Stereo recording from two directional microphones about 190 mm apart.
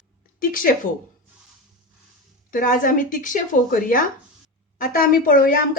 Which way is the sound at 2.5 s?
45° left (ahead or behind).